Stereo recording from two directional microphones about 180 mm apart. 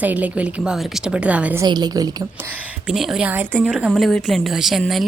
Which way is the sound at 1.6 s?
25° right (ahead or behind).